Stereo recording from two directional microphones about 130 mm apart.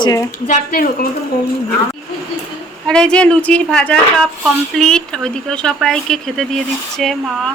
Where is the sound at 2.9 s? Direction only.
5° left (ahead or behind).